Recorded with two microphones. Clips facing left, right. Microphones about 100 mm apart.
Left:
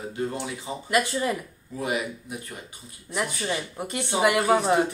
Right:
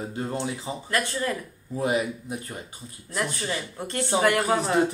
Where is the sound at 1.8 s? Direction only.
30° right (ahead or behind).